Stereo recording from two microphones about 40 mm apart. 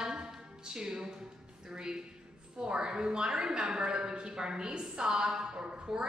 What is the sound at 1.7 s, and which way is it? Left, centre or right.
A woman's voice, centre.